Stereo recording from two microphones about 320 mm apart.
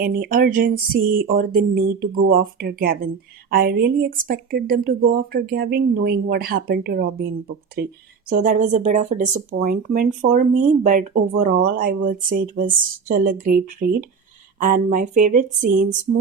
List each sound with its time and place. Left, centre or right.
0.0 s speech: right